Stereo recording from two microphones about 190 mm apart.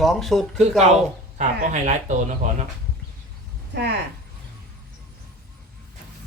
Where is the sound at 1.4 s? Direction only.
40° right (ahead or behind).